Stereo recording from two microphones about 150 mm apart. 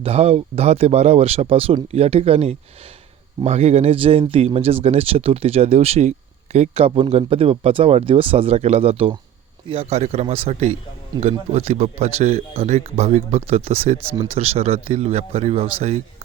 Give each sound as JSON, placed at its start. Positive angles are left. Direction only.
{"t": 0.0, "sound": "speech", "side_deg": -40}